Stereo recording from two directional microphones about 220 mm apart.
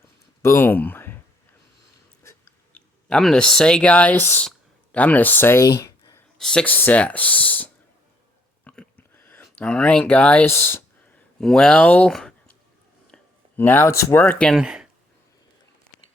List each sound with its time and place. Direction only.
0.4 s speech: 10° left (ahead or behind)
2.2 s speech: 10° left (ahead or behind)
5.8 s a sound: 15° left (ahead or behind)
6.4 s speech: 5° left (ahead or behind)
8.6 s a sound: 5° left (ahead or behind)
13.6 s speech: 10° left (ahead or behind)